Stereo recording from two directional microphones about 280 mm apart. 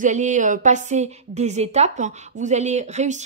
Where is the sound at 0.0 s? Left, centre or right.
Right.